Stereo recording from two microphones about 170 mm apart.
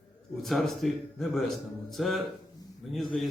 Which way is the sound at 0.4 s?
Centre (ahead or behind).